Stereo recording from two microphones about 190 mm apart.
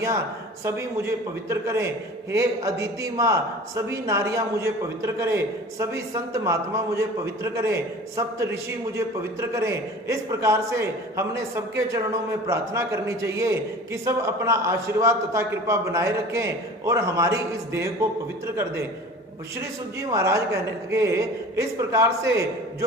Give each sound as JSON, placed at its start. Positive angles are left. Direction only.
{"t": 0.6, "sound": "a man's voice", "side_deg": -15}